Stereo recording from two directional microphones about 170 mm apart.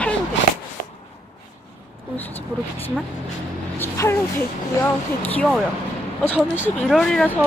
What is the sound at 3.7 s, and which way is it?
Speech, 15° left (ahead or behind).